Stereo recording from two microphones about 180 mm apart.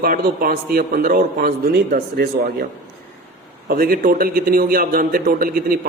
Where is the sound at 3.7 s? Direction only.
55° right (ahead or behind).